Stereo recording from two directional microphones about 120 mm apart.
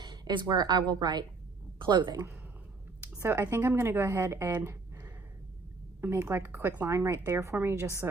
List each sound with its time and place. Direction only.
0.0 s a woman's voice: 35° right (ahead or behind)
3.2 s a woman's voice: 20° right (ahead or behind)